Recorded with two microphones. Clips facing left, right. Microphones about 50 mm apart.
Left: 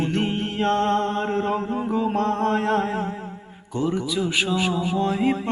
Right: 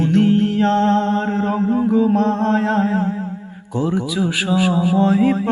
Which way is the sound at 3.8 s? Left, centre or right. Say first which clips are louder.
Right 4 dB; centre.